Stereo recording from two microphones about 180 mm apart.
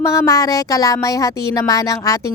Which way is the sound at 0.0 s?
20° left (ahead or behind).